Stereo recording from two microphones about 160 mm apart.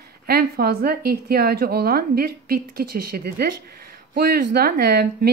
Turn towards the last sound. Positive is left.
turn(degrees=-85)